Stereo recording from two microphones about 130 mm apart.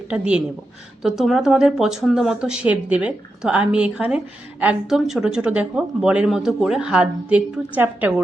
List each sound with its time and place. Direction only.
0.1 s speech: 10° right (ahead or behind)